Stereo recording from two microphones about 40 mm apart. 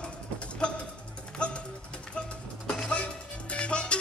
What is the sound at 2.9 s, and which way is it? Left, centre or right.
Music, left.